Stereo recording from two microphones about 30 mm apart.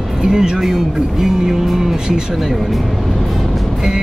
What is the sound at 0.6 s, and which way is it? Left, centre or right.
Speech, centre.